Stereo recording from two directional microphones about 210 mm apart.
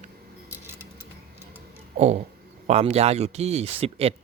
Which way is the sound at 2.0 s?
35° right (ahead or behind).